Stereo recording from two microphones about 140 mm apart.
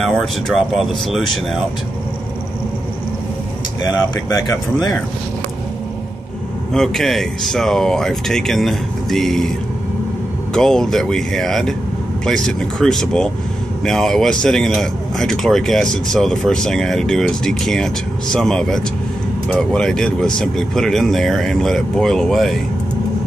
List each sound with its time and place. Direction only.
0.0 s speech: 5° left (ahead or behind)
4.1 s speech: 30° left (ahead or behind)
6.7 s speech: 5° left (ahead or behind)
10.5 s speech: 5° left (ahead or behind)